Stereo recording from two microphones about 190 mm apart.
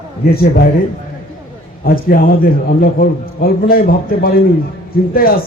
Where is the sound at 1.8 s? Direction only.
50° left (ahead or behind).